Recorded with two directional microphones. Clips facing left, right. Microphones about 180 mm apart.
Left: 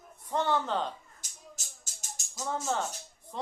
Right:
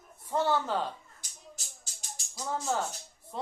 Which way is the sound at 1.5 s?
45° left (ahead or behind).